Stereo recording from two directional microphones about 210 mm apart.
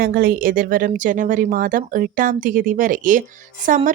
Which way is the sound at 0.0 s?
45° right (ahead or behind).